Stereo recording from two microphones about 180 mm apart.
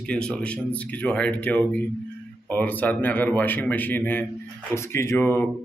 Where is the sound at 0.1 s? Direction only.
5° left (ahead or behind).